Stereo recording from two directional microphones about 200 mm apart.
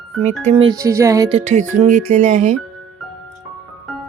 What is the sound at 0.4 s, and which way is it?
Speech, 25° right (ahead or behind).